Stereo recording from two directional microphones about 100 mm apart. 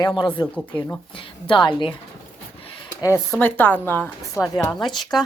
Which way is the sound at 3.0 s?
20° left (ahead or behind).